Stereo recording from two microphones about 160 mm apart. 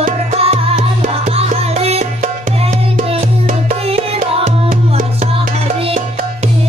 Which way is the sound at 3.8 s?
40° right (ahead or behind).